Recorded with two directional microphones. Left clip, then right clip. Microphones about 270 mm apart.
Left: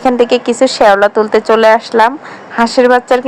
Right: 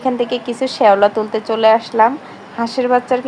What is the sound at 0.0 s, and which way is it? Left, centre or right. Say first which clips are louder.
Speech: left 8 dB; left.